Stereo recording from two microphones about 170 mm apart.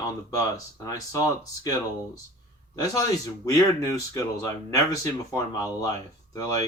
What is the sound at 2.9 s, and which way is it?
Speech, 20° left (ahead or behind).